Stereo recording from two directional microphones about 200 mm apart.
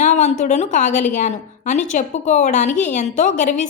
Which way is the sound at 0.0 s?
40° left (ahead or behind).